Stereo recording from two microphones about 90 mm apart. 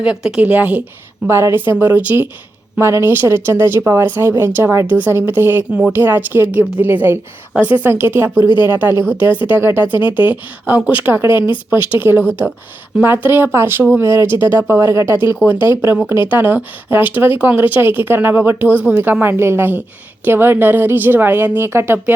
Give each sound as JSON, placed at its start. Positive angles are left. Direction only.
{"t": 0.0, "sound": "speech", "side_deg": -10}
{"t": 1.3, "sound": "speech", "side_deg": -30}
{"t": 2.7, "sound": "speech", "side_deg": -30}
{"t": 8.4, "sound": "speech", "side_deg": 55}
{"t": 8.7, "sound": "speech", "side_deg": -25}